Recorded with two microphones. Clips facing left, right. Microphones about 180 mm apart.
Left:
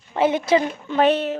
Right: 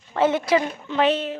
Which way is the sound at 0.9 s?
50° left (ahead or behind).